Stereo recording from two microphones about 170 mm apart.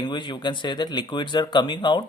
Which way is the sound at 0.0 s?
25° left (ahead or behind).